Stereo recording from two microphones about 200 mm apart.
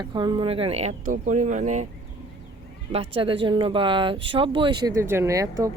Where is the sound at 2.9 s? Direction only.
30° right (ahead or behind).